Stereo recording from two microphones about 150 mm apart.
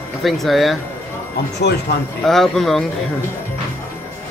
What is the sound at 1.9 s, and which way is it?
Speech, 90° left.